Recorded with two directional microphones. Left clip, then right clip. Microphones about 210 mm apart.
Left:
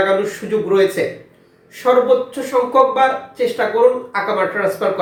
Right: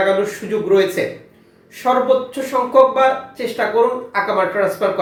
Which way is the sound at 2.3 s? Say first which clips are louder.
Left 1 dB; 5° left (ahead or behind).